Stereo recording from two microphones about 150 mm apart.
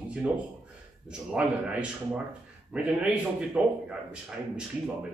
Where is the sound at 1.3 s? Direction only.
5° right (ahead or behind).